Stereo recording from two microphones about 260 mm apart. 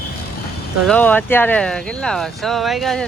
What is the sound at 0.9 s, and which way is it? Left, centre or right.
Speech, centre.